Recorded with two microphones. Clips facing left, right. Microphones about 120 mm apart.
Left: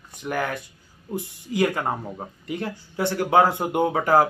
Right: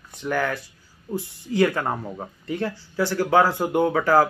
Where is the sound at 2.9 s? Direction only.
20° left (ahead or behind).